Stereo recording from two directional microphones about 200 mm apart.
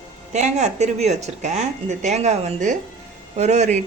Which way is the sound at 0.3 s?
35° right (ahead or behind).